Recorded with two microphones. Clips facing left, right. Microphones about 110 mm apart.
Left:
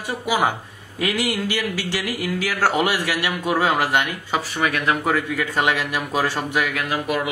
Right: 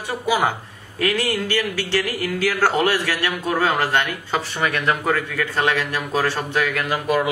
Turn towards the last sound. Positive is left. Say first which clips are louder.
# right 3 dB
turn(degrees=5)  # may be behind; listen again after turning